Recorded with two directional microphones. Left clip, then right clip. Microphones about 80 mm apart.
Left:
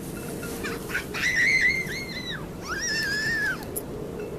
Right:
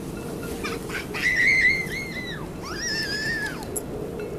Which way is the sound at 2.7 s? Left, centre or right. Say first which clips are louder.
Left 1 dB; left.